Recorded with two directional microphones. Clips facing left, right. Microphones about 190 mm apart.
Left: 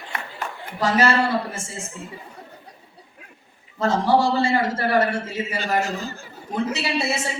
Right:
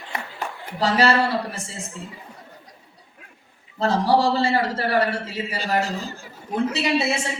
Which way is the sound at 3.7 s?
35° right (ahead or behind).